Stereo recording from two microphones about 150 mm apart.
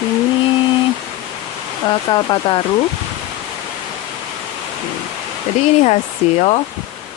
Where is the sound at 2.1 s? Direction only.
30° left (ahead or behind).